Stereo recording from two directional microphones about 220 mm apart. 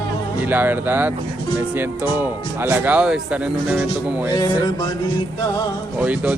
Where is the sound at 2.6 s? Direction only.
10° right (ahead or behind).